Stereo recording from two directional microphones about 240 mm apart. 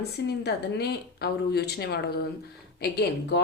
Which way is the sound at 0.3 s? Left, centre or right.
Left.